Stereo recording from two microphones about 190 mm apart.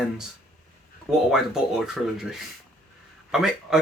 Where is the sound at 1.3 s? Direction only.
Centre (ahead or behind).